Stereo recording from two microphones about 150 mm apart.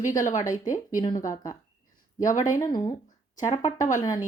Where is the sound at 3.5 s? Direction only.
50° left (ahead or behind).